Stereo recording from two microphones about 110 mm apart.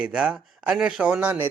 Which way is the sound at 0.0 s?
10° right (ahead or behind).